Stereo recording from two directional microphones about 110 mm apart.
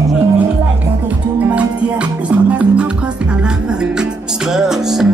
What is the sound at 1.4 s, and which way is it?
Music, 10° right (ahead or behind).